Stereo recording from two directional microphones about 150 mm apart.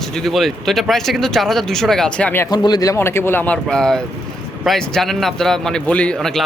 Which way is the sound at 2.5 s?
25° left (ahead or behind).